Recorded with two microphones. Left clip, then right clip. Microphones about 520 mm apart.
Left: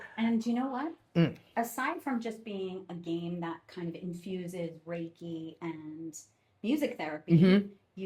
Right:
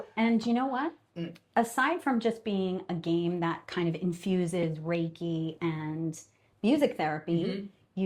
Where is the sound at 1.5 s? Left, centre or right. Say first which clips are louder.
Right 10 dB; right.